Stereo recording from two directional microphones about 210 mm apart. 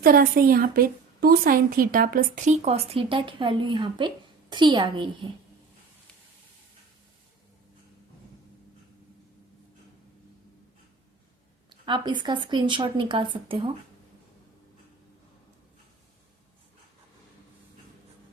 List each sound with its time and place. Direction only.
0.0 s a woman's voice: 45° right (ahead or behind); by 5.3 s 25° right (ahead or behind)
11.7 s speech: 20° right (ahead or behind)